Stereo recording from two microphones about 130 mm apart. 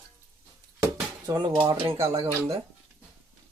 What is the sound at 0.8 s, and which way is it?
Dishes, 30° right (ahead or behind).